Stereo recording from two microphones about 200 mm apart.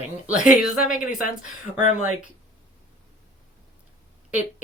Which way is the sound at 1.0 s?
40° left (ahead or behind).